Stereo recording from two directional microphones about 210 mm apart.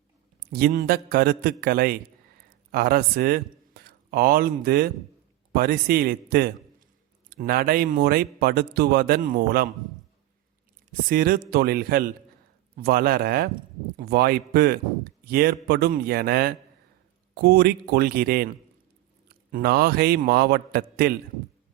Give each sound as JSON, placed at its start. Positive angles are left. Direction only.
{"t": 0.3, "sound": "speech", "side_deg": -45}
{"t": 11.1, "sound": "speech", "side_deg": -45}
{"t": 19.5, "sound": "speech", "side_deg": -45}